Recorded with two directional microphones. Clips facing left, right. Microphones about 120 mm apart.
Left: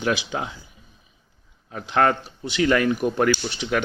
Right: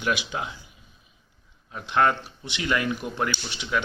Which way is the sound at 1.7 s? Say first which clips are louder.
Left 2 dB; 45° left (ahead or behind).